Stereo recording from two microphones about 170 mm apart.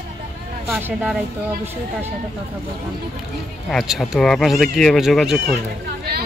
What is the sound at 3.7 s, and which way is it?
Speech, centre (ahead or behind).